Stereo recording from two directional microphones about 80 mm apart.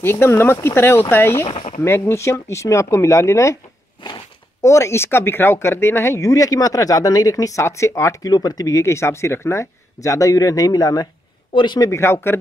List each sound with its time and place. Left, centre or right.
0.0 s speech: left
4.6 s speech: left
8.3 s speech: left
11.5 s speech: left
11.9 s speech: left